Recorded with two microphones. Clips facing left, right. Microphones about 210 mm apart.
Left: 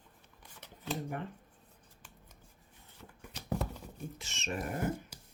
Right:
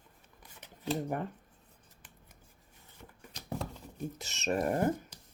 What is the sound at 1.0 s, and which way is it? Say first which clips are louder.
Speech: right 4 dB; 45° right (ahead or behind).